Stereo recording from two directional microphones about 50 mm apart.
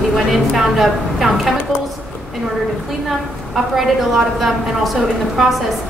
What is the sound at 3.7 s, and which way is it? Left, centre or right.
A woman's voice, centre.